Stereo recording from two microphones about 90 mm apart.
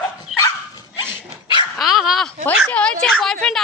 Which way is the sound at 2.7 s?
10° left (ahead or behind).